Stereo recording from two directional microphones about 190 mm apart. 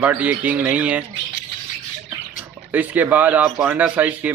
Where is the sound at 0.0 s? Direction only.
10° right (ahead or behind).